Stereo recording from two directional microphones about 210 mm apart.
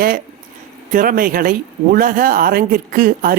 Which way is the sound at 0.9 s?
40° right (ahead or behind).